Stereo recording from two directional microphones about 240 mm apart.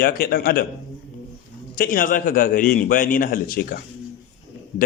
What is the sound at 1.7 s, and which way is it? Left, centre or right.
Speech, left.